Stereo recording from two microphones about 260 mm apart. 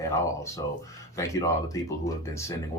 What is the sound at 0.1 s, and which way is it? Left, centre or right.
Speech, centre.